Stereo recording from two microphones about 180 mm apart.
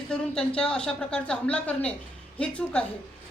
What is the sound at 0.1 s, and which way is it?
A woman's voice, 5° left (ahead or behind).